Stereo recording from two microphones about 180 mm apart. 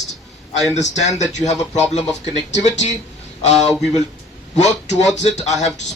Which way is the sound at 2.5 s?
40° left (ahead or behind).